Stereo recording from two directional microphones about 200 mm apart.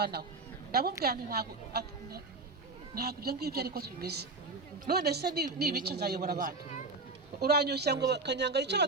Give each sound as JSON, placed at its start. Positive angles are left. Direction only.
{"t": 0.0, "sound": "a woman's voice", "side_deg": -55}